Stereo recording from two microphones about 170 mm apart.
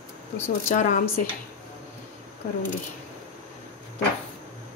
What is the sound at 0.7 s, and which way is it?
Speech, 45° left (ahead or behind).